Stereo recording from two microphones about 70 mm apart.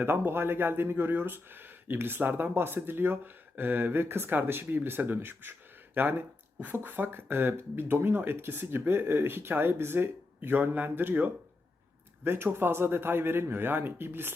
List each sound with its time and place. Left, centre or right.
0.0 s speech: right